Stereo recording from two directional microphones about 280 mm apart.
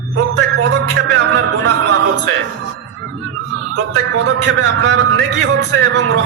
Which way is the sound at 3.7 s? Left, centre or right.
Right.